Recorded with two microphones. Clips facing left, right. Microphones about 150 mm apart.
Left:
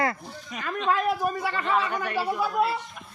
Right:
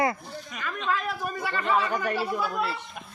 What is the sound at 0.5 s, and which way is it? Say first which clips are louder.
Speech: left 3 dB; 30° left (ahead or behind).